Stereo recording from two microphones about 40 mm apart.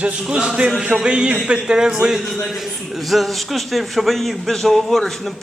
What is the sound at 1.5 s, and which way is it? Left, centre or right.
Speech, centre.